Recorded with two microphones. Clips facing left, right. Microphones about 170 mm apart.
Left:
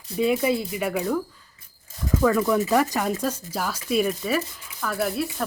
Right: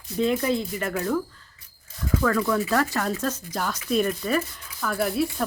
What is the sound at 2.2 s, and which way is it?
Speech, 15° left (ahead or behind).